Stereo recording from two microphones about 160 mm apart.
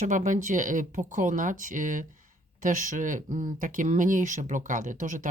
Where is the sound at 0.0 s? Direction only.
50° right (ahead or behind).